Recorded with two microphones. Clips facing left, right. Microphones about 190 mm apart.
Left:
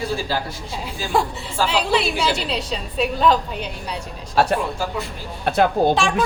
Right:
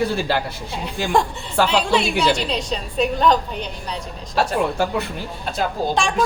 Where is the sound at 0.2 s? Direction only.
65° right (ahead or behind).